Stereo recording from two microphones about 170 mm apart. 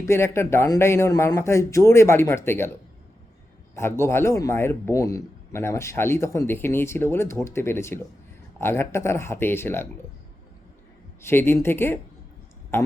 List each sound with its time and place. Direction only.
0.0 s a man's voice: 15° left (ahead or behind)
3.8 s a man's voice: 15° left (ahead or behind)
11.2 s a man's voice: 15° left (ahead or behind)